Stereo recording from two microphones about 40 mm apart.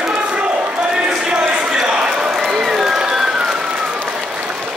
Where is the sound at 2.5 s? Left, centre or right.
Centre.